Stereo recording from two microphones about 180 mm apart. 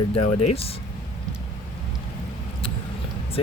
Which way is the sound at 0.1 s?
35° left (ahead or behind).